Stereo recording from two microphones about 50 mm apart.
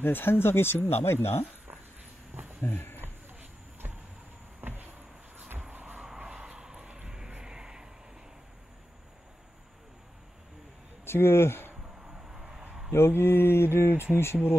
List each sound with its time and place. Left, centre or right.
0.0 s speech: left
2.6 s speech: left
4.6 s a sound: right
5.7 s vehicle: right
5.9 s vehicle: centre
11.1 s speech: left
12.1 s vehicle: centre
12.9 s speech: left